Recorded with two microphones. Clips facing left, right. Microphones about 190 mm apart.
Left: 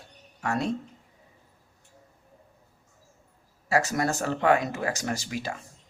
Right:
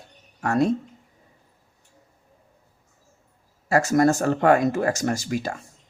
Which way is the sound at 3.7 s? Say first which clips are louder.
Right 7 dB; 45° right (ahead or behind).